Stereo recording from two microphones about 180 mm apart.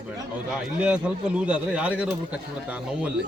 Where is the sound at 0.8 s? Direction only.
5° right (ahead or behind).